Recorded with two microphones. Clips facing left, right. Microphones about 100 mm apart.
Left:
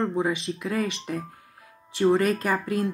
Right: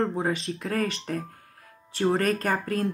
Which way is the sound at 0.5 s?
15° left (ahead or behind).